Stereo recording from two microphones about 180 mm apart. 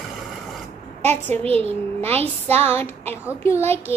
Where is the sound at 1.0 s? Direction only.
10° left (ahead or behind).